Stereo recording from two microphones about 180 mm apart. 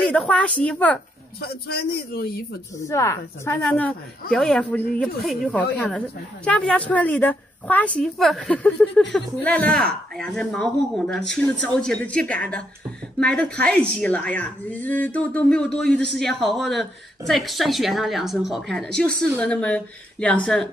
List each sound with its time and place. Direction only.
0.0 s speech: 5° left (ahead or behind)
1.7 s a man's voice: 60° left (ahead or behind)
2.9 s a woman's voice: 15° left (ahead or behind)